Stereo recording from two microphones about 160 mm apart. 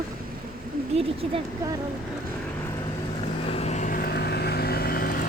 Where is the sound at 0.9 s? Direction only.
35° right (ahead or behind).